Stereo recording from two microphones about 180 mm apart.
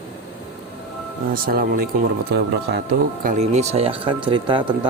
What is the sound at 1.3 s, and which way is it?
Speech, 55° right (ahead or behind).